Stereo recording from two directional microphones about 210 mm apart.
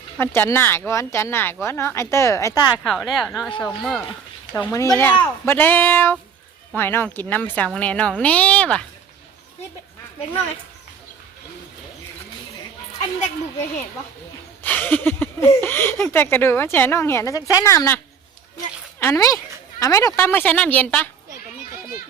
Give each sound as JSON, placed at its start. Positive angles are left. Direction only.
{"t": 0.2, "sound": "speech", "side_deg": 10}
{"t": 2.7, "sound": "speech", "side_deg": 0}
{"t": 4.5, "sound": "speech", "side_deg": 15}
{"t": 14.6, "sound": "speech", "side_deg": 10}
{"t": 18.5, "sound": "a sound", "side_deg": 15}
{"t": 19.8, "sound": "speech", "side_deg": 15}